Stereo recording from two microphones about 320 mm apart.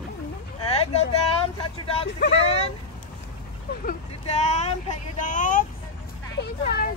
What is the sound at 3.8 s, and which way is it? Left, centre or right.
Speech, left.